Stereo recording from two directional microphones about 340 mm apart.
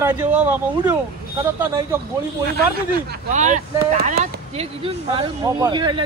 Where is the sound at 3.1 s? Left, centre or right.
Right.